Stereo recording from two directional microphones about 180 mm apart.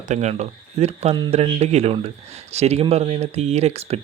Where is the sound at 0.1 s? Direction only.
40° right (ahead or behind).